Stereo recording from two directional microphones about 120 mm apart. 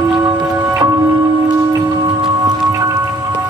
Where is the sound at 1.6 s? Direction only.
30° right (ahead or behind).